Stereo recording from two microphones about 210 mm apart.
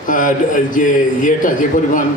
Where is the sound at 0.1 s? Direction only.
40° left (ahead or behind).